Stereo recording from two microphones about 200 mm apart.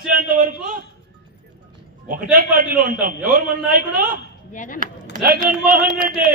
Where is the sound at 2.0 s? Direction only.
45° right (ahead or behind).